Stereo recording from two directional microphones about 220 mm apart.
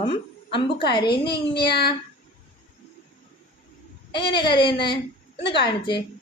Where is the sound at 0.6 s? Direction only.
20° left (ahead or behind).